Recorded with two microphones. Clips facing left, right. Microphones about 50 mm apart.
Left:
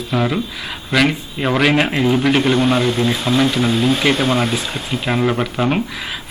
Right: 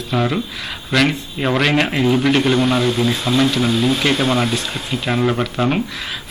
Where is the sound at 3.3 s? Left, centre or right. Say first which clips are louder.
Left 1 dB; centre.